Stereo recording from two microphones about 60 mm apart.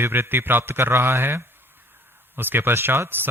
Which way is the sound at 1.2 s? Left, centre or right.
Right.